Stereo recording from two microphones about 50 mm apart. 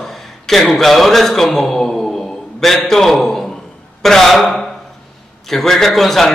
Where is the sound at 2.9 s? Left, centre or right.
Centre.